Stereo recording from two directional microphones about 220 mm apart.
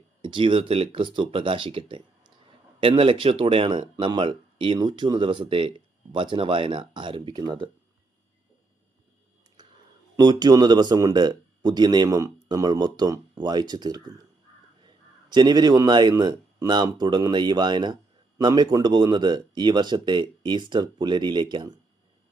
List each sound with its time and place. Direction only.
0.2 s speech: 20° right (ahead or behind)
9.6 s a sound: 20° right (ahead or behind)
10.2 s speech: 20° right (ahead or behind)